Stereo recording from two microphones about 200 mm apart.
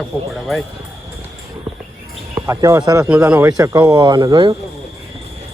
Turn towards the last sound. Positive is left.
turn(degrees=-20)  # may be behind; listen again after turning